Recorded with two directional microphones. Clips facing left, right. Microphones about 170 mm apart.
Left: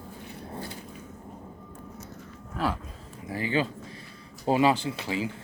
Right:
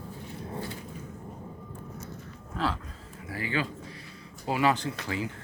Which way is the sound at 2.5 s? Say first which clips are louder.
Left 1 dB; 15° left (ahead or behind).